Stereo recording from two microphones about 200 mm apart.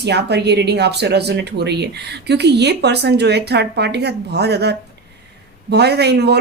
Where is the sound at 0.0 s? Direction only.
55° right (ahead or behind).